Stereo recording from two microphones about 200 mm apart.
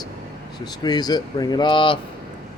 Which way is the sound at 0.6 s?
20° left (ahead or behind).